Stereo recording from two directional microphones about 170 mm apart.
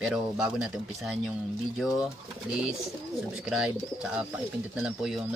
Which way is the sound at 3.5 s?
5° right (ahead or behind).